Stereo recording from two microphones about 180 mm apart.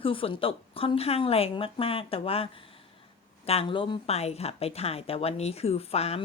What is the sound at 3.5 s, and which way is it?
A woman's voice, 30° left (ahead or behind).